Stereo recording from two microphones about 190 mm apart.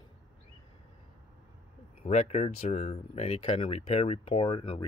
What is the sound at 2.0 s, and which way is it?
Speech, 35° left (ahead or behind).